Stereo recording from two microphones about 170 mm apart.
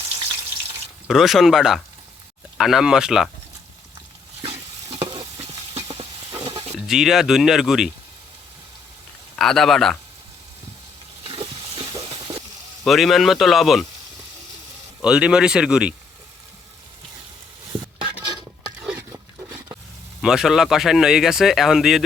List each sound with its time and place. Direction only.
1.0 s speech: centre (ahead or behind)
4.4 s stir: 35° right (ahead or behind)
6.4 s sizzle: 35° right (ahead or behind)
6.7 s speech: centre (ahead or behind)
9.3 s speech: centre (ahead or behind)
11.2 s stir: 35° right (ahead or behind)
12.8 s speech: centre (ahead or behind)
15.0 s speech: 5° right (ahead or behind)
17.7 s a sound: 25° right (ahead or behind)
18.8 s a sound: 10° right (ahead or behind)
20.2 s speech: 5° right (ahead or behind)